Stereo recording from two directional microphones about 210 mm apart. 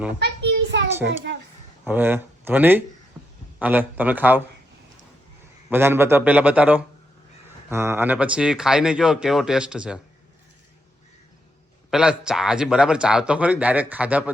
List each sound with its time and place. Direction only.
0.2 s a sound: 55° right (ahead or behind)
1.0 s a child's voice: 55° right (ahead or behind)
1.8 s a man's voice: 10° right (ahead or behind)
5.7 s a man's voice: 10° right (ahead or behind)
11.9 s speech: 5° right (ahead or behind)